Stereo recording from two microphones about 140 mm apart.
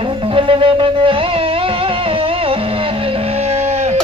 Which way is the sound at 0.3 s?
40° right (ahead or behind).